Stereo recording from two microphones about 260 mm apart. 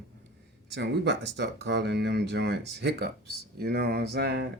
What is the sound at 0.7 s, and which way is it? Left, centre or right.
Speech, right.